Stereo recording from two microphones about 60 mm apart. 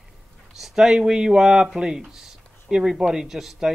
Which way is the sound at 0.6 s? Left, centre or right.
Centre.